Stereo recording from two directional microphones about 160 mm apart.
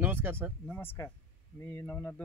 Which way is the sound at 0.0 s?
10° right (ahead or behind).